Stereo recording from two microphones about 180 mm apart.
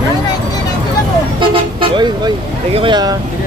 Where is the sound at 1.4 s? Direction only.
25° right (ahead or behind).